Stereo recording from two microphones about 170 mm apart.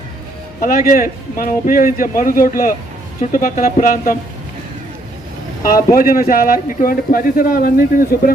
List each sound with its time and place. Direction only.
0.6 s speech: 55° left (ahead or behind)
5.6 s speech: 55° left (ahead or behind)